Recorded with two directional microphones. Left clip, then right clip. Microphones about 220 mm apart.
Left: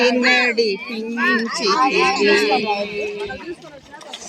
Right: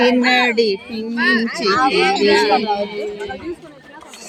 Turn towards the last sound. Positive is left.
turn(degrees=-45)  # may be behind; listen again after turning